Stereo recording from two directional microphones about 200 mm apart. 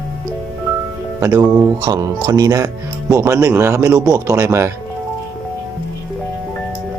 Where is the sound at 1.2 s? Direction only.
10° right (ahead or behind).